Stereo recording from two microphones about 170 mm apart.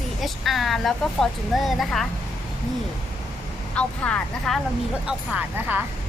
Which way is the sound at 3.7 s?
5° left (ahead or behind).